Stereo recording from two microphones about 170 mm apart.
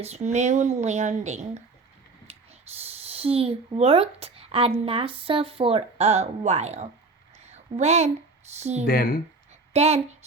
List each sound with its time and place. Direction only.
0.0 s speech: 40° right (ahead or behind)
2.3 s spray: 35° right (ahead or behind)
2.8 s speech: 35° right (ahead or behind)
7.3 s a sound: 40° right (ahead or behind)
8.5 s speech: 40° right (ahead or behind)
8.9 s speech: 60° left (ahead or behind)
9.7 s speech: 40° right (ahead or behind)